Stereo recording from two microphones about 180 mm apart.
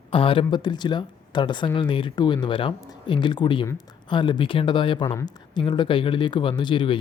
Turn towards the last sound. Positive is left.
turn(degrees=25)  # may be behind; listen again after turning